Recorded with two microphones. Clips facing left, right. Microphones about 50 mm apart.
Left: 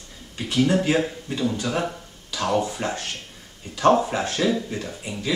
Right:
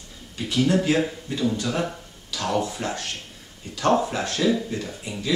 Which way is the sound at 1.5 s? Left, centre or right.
Left.